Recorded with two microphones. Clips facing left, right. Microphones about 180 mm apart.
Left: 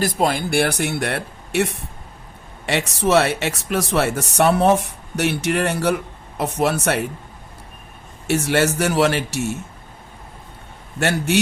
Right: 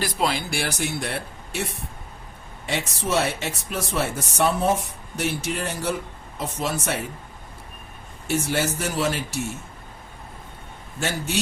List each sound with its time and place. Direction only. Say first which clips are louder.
0.0 s speech: left 5 dB; 45° left (ahead or behind); by 7.0 s 70° left (ahead or behind)
8.3 s speech: left 6 dB; 75° left (ahead or behind)
11.0 s speech: left 7 dB; 70° left (ahead or behind)